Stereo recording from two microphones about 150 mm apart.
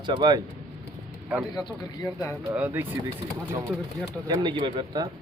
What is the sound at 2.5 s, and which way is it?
Speech, 10° right (ahead or behind).